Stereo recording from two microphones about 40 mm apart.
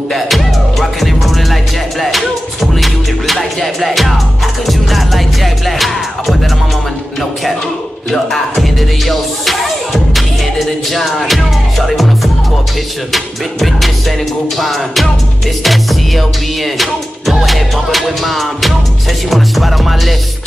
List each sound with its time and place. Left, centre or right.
0.1 s music: centre
8.1 s music: centre